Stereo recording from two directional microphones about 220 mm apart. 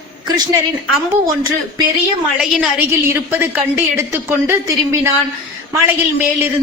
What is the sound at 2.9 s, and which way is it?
A woman's voice, 10° right (ahead or behind).